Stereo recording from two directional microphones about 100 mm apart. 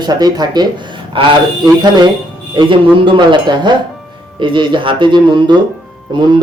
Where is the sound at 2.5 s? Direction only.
55° right (ahead or behind).